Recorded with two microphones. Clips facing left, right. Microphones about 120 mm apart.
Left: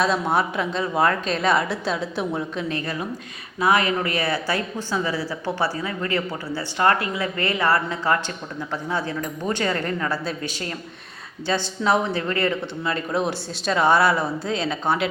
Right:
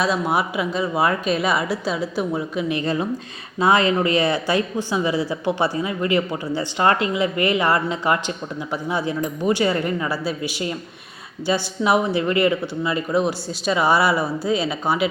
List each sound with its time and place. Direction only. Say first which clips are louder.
0.0 s a woman's voice: even; 5° right (ahead or behind)
2.6 s speech: right 4 dB; 15° right (ahead or behind)
3.6 s speech: right 3 dB; 25° right (ahead or behind); by 15.1 s 5° right (ahead or behind)